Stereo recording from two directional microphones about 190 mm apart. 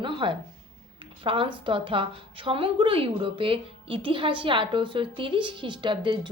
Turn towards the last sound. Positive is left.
turn(degrees=-25)  # may be behind; listen again after turning